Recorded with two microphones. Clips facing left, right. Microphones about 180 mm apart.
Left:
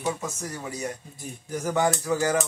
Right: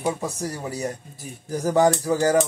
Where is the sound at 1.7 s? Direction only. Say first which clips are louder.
Right 5 dB; 35° right (ahead or behind).